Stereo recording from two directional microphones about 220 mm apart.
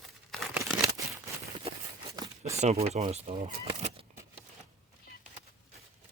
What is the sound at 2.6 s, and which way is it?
Speech, 30° right (ahead or behind).